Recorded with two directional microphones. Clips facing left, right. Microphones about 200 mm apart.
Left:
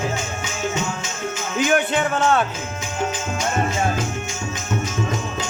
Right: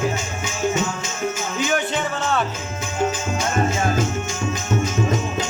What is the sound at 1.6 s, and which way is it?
Music, 55° left (ahead or behind).